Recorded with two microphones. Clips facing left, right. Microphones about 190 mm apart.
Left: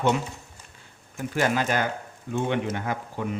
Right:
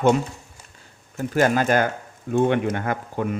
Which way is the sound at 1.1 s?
45° right (ahead or behind).